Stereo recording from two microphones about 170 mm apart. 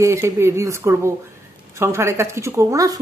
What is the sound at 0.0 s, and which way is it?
Speech, 15° right (ahead or behind).